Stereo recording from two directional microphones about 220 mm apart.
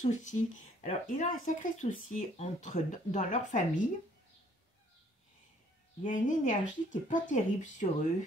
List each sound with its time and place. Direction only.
0.0 s speech: 35° left (ahead or behind)
6.0 s speech: 35° left (ahead or behind)